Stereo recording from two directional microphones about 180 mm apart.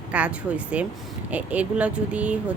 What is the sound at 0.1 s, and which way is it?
Speech, 5° right (ahead or behind).